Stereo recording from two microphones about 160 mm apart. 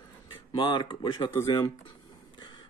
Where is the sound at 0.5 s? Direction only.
30° left (ahead or behind).